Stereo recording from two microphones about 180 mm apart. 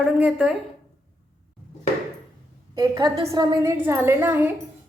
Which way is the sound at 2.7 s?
20° right (ahead or behind).